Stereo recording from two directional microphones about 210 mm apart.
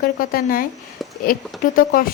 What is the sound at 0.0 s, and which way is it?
A woman's voice, 45° left (ahead or behind).